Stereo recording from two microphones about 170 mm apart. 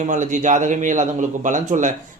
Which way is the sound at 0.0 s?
45° right (ahead or behind).